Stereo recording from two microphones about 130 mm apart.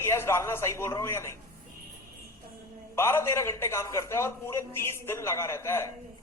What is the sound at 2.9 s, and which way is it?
A man's voice, 20° left (ahead or behind).